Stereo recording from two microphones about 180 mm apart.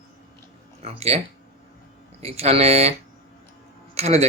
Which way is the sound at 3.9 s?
35° right (ahead or behind).